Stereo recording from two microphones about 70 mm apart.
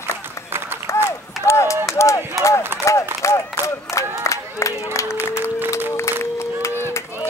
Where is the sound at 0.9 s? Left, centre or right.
Left.